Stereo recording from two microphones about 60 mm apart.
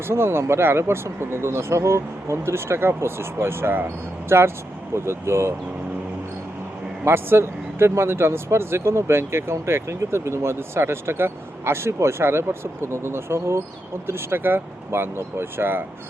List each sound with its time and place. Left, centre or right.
0.1 s speech: right
7.0 s speech: right